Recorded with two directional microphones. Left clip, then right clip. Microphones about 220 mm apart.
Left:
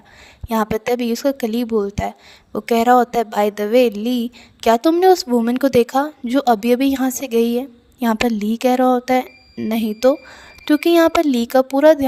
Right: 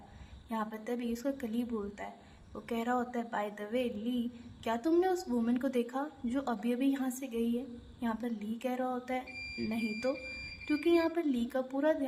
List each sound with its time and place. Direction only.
0.4 s a woman's voice: 45° left (ahead or behind)